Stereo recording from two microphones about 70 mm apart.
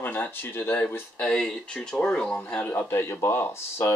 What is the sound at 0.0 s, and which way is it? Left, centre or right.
Speech, left.